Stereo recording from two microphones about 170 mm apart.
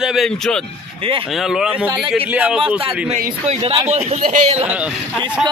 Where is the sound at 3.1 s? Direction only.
40° right (ahead or behind).